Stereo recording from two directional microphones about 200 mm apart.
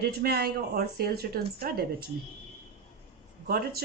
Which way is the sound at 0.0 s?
50° right (ahead or behind).